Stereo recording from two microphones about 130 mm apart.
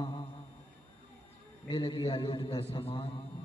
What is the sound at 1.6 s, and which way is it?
A man's voice, 35° left (ahead or behind).